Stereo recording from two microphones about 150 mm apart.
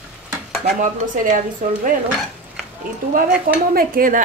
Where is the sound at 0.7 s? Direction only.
60° right (ahead or behind).